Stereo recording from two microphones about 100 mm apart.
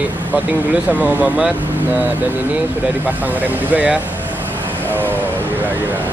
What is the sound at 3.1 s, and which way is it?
Speech, 15° right (ahead or behind).